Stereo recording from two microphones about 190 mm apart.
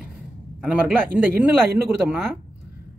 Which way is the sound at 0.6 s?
5° right (ahead or behind).